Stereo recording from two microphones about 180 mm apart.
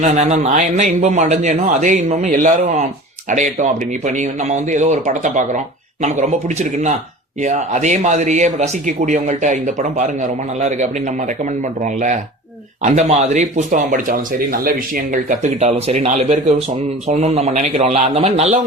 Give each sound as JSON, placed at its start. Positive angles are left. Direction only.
{"t": 0.0, "sound": "speech", "side_deg": -40}
{"t": 12.8, "sound": "speech", "side_deg": -40}
{"t": 15.6, "sound": "speech", "side_deg": -40}